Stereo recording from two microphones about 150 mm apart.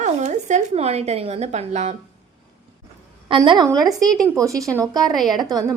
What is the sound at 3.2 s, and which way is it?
Speech, 35° right (ahead or behind).